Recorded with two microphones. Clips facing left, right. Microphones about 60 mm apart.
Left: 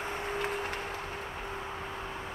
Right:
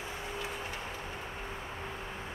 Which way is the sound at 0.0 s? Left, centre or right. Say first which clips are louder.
Left 5 dB; left.